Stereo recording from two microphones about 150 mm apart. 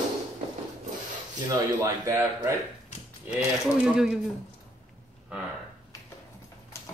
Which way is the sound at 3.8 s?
5° right (ahead or behind).